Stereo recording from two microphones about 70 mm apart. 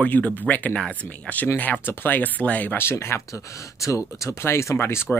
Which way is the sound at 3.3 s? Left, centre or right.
Left.